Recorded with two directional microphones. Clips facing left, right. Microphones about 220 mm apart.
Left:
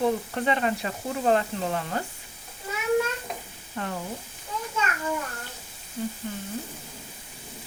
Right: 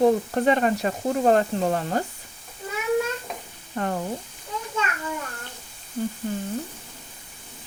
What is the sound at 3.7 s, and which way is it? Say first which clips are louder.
Frying: right 5 dB; 45° right (ahead or behind).